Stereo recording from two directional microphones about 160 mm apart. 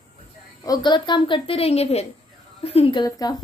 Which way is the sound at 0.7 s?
30° left (ahead or behind).